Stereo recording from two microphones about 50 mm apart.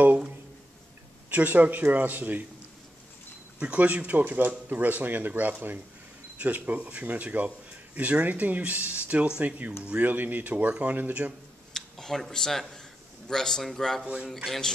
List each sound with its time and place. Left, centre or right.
1.3 s speech: right
3.5 s speech: right
4.2 s speech: right
4.5 s speech: right
10.7 s speech: right
11.0 s speech: right
11.7 s speech: centre
14.0 s speech: right